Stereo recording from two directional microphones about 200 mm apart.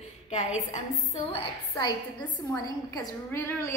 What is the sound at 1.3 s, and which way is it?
A woman's voice, 20° left (ahead or behind).